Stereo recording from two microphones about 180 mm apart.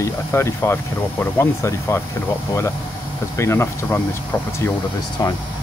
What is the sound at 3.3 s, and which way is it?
Speech, 15° left (ahead or behind).